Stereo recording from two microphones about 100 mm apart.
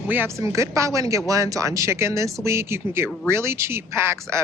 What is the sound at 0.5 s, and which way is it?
Speech, 30° right (ahead or behind).